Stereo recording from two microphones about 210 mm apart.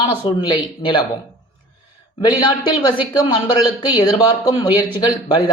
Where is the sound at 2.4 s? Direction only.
20° left (ahead or behind).